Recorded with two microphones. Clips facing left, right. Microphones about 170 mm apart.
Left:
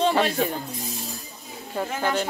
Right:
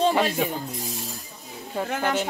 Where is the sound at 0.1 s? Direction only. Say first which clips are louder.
Left 1 dB; 10° right (ahead or behind).